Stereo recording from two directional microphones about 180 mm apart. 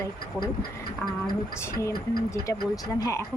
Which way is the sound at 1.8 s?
15° left (ahead or behind).